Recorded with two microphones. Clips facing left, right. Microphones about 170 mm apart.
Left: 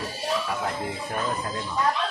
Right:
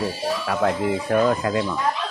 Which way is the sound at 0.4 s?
90° right.